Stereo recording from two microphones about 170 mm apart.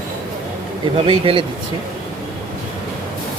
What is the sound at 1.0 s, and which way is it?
Speech, 30° right (ahead or behind).